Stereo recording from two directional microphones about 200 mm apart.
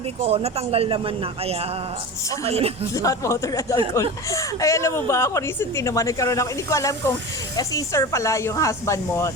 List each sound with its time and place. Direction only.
0.2 s speech: 30° right (ahead or behind)
2.9 s a woman's voice: 15° left (ahead or behind)